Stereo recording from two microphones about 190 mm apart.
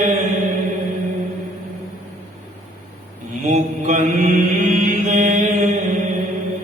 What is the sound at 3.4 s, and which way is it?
Mantra, 40° right (ahead or behind).